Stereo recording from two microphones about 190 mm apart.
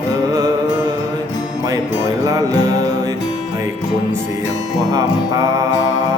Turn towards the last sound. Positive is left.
turn(degrees=-20)  # may be behind; listen again after turning